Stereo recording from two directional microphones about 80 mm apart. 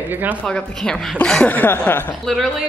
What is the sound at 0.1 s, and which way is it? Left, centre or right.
Speech, right.